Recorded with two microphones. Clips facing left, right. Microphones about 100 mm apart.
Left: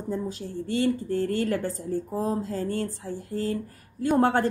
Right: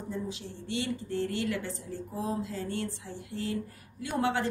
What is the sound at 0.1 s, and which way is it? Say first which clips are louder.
A woman's voice: left 7 dB; 45° left (ahead or behind).